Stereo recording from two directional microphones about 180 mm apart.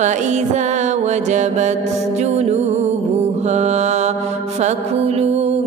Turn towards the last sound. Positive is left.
turn(degrees=-35)  # may be behind; listen again after turning